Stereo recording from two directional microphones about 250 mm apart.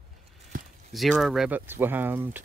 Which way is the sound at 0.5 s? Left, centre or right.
Right.